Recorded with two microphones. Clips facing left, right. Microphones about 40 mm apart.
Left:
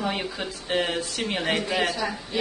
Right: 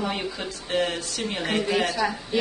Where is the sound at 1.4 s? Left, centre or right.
Left.